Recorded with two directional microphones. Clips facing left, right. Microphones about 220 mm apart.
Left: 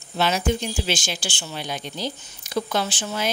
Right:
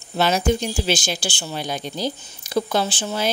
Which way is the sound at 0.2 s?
40° right (ahead or behind).